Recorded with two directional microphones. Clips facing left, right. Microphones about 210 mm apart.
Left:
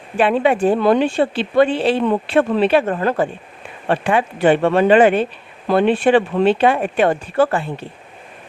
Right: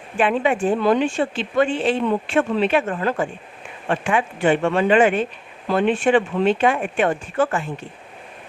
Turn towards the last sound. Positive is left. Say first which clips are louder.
# left 4 dB
turn(degrees=35)  # may be behind; listen again after turning